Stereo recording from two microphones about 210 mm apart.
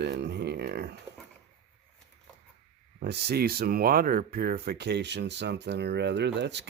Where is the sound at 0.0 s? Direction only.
55° right (ahead or behind).